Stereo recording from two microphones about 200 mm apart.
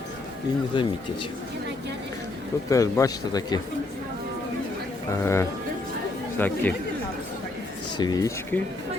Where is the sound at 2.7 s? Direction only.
15° left (ahead or behind).